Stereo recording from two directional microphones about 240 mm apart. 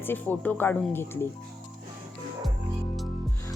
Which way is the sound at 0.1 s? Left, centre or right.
Centre.